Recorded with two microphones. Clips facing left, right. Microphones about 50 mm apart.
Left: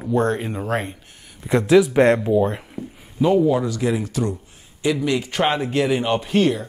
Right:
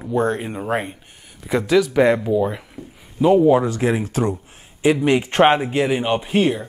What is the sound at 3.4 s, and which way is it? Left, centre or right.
Speech, right.